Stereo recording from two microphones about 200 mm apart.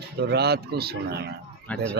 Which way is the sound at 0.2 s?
55° right (ahead or behind).